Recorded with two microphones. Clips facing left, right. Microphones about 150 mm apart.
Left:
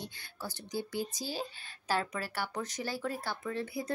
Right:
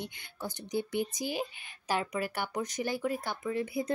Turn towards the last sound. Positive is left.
turn(degrees=-15)  # may be behind; listen again after turning